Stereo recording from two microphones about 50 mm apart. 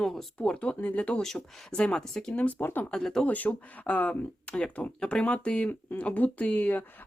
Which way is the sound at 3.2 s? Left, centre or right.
Left.